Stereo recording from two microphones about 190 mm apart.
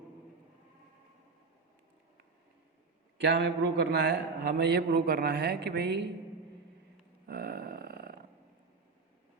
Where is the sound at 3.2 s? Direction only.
65° right (ahead or behind).